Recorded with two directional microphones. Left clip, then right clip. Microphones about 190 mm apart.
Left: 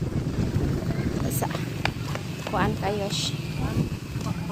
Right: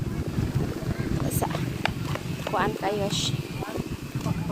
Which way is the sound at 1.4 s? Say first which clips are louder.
Right 1 dB; centre (ahead or behind).